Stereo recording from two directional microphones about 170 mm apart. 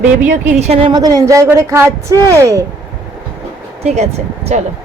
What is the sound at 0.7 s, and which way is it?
Speech, 30° right (ahead or behind).